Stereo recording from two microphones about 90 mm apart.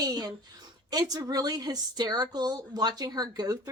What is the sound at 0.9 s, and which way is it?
Speech, 45° right (ahead or behind).